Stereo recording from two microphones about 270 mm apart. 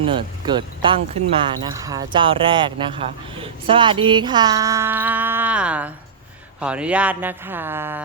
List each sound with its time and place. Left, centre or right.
0.0 s speech: centre